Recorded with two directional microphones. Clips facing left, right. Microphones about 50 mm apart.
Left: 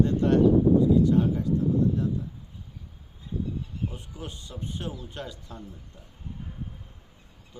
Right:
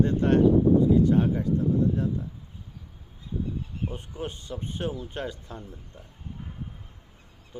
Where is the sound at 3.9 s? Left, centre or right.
Right.